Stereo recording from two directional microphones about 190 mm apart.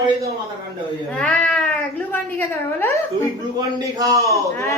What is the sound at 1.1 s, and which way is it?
Cat, 5° left (ahead or behind).